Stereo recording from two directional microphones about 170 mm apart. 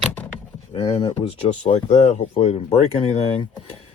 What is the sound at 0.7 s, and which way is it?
Speech, 40° left (ahead or behind).